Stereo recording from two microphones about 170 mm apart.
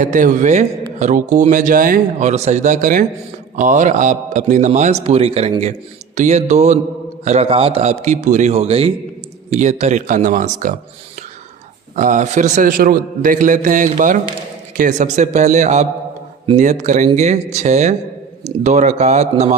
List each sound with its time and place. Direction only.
0.0 s a man's voice: 50° right (ahead or behind)
11.9 s a man's voice: 45° right (ahead or behind)